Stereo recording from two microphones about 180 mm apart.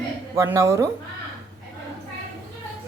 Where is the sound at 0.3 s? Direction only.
15° right (ahead or behind).